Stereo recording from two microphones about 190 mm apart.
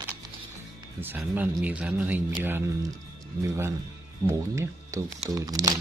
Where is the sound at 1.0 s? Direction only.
10° right (ahead or behind).